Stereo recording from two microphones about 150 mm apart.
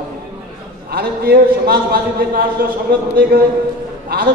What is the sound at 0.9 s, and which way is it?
A man's voice, 90° right.